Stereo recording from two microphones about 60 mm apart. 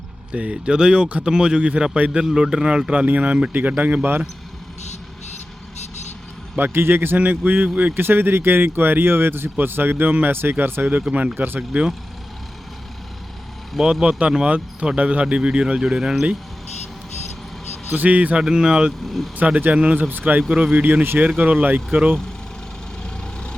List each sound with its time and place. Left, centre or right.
0.3 s speech: centre
6.6 s speech: right
13.7 s speech: centre
17.8 s a man's voice: right
18.4 s speech: centre
19.0 s speech: centre
19.5 s a man's voice: right